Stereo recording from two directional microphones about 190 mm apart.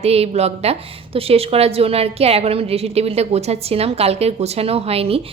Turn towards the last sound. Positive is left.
turn(degrees=-30)  # may be behind; listen again after turning